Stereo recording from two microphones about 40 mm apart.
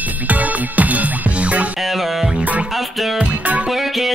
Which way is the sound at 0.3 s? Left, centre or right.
Right.